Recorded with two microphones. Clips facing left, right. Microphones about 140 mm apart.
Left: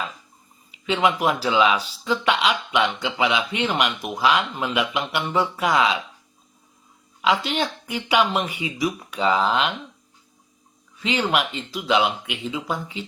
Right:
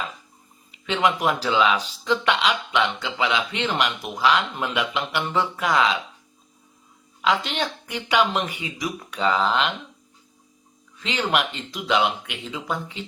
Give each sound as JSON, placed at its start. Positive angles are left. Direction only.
{"t": 0.9, "sound": "speech", "side_deg": 5}
{"t": 7.2, "sound": "speech", "side_deg": 5}
{"t": 11.0, "sound": "speech", "side_deg": 5}